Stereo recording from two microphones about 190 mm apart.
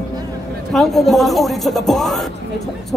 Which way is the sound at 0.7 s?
Centre (ahead or behind).